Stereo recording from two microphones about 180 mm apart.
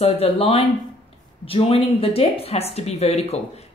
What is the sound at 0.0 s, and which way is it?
A woman's voice, 35° left (ahead or behind).